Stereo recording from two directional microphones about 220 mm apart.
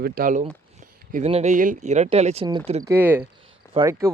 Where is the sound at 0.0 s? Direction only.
40° right (ahead or behind); by 2.8 s 25° right (ahead or behind).